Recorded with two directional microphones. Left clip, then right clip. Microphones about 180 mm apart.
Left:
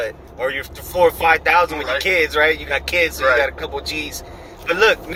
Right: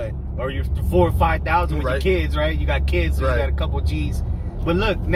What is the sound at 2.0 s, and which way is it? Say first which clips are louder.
Speech: left 9 dB; 20° left (ahead or behind).